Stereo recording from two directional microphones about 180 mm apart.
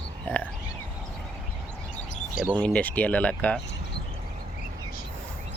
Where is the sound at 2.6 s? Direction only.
10° left (ahead or behind).